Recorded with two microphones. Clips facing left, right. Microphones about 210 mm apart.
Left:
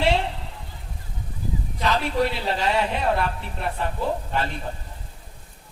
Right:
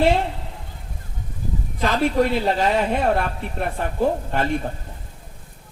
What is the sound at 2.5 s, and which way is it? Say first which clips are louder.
Speech: right 4 dB; 50° right (ahead or behind).